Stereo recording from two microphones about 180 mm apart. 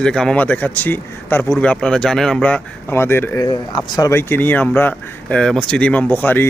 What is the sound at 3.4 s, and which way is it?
Speech, 25° left (ahead or behind).